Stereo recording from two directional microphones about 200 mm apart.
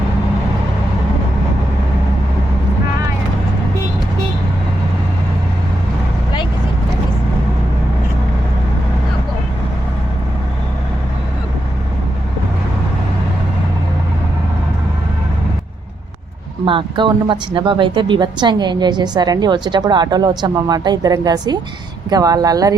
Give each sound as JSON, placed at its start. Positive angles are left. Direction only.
{"t": 16.6, "sound": "speech", "side_deg": -25}